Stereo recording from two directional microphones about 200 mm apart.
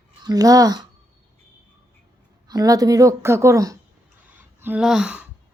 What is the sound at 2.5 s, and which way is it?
Speech, 20° right (ahead or behind).